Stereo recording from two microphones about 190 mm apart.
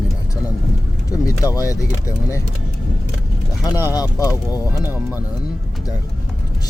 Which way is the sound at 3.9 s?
20° left (ahead or behind).